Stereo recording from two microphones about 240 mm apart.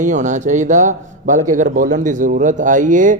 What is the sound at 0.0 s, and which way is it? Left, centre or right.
A man's voice, right.